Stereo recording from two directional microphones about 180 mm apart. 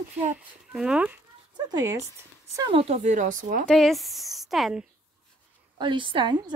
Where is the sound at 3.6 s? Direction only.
5° left (ahead or behind).